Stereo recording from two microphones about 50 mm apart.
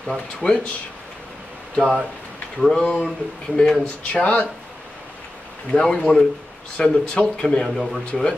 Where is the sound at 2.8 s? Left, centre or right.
Left.